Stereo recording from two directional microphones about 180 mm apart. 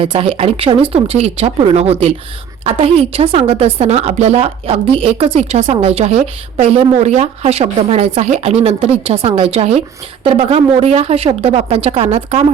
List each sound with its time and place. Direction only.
0.0 s a woman's voice: 30° right (ahead or behind)